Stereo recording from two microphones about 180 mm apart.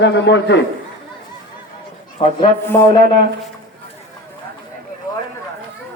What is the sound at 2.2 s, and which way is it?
Speech, 30° left (ahead or behind).